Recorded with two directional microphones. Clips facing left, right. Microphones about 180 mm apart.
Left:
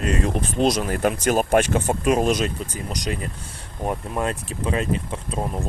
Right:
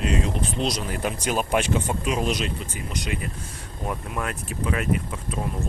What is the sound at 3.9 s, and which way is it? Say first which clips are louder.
Speech: left 5 dB; 25° left (ahead or behind).